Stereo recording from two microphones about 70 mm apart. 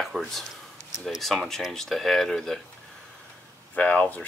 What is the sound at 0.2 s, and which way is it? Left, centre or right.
Speech, centre.